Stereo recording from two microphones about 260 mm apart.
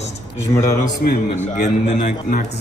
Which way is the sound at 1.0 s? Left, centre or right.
Left.